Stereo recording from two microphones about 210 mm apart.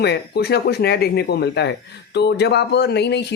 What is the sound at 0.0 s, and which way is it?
Speech, 50° left (ahead or behind).